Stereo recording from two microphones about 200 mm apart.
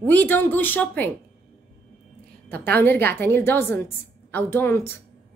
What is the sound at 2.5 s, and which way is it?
A woman's voice, 10° left (ahead or behind).